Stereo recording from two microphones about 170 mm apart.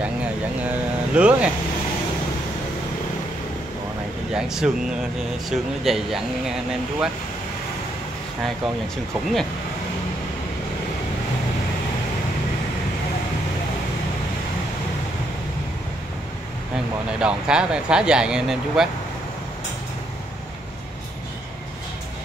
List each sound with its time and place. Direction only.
0.0 s speech: 10° right (ahead or behind)
4.3 s speech: 5° right (ahead or behind)
8.9 s speech: 5° left (ahead or behind)
17.2 s speech: 5° right (ahead or behind)